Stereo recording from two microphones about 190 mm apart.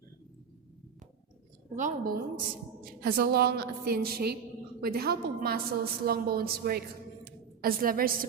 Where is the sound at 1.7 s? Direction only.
40° right (ahead or behind).